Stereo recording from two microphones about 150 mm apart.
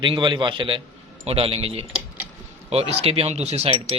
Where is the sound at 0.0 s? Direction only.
30° right (ahead or behind).